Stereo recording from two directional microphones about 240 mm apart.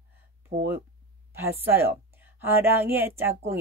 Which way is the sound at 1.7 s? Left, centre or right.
Centre.